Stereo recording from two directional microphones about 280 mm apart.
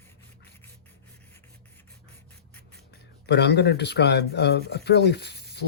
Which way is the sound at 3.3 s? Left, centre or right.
Left.